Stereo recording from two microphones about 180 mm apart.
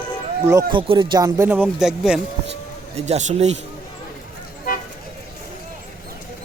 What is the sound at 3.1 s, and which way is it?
Speech, 40° right (ahead or behind).